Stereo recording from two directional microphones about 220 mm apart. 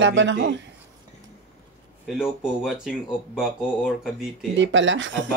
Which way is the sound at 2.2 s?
5° right (ahead or behind).